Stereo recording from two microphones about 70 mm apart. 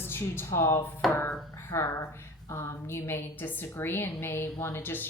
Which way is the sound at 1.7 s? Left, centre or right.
Left.